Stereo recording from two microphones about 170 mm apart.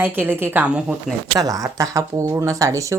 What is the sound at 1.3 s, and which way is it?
Speech, 20° right (ahead or behind).